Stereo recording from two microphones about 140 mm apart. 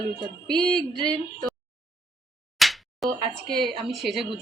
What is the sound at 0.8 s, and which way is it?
Speech, 35° right (ahead or behind).